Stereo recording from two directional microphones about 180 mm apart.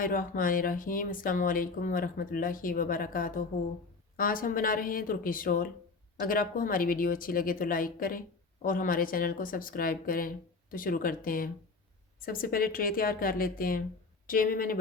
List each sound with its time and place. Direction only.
0.0 s speech: 50° left (ahead or behind)